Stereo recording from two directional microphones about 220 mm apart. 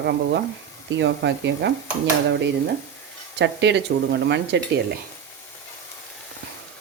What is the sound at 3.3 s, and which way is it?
Speech, 55° right (ahead or behind).